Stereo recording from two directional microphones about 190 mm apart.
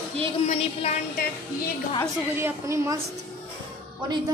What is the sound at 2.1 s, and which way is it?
Speech, 10° right (ahead or behind).